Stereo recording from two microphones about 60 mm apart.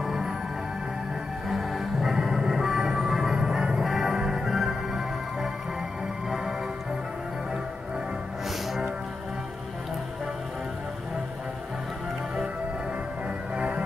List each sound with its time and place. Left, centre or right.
0.0 s music: centre
1.5 s music: centre
13.6 s music: right